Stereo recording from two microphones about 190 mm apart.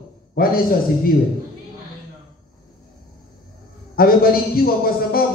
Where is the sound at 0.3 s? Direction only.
50° left (ahead or behind).